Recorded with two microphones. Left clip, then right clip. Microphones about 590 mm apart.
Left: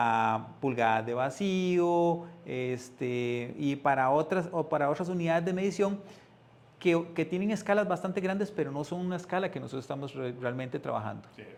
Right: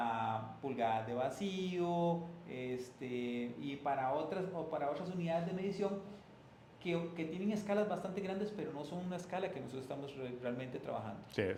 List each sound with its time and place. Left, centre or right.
0.6 s speech: left
6.8 s speech: left
11.4 s speech: right